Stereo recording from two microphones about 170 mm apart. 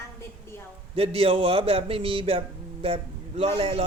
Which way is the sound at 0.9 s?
35° right (ahead or behind).